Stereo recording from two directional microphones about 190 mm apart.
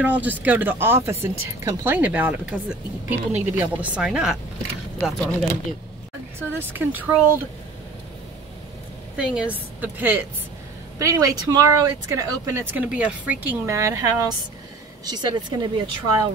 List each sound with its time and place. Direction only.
0.0 s speech: 10° right (ahead or behind)
9.1 s a woman's voice: 5° right (ahead or behind); by 15.6 s 20° right (ahead or behind)